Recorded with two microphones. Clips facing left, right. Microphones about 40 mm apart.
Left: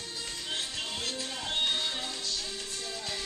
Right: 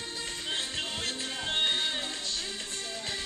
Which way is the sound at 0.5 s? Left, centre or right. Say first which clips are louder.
Right 1 dB; right.